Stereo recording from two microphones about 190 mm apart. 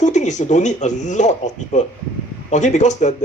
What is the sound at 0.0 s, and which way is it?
Speech, 40° left (ahead or behind).